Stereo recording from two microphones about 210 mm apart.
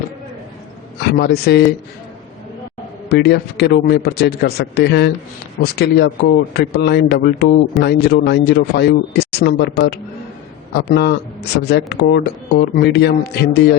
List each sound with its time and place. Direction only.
1.0 s a man's voice: 50° left (ahead or behind)
3.1 s a man's voice: 50° left (ahead or behind)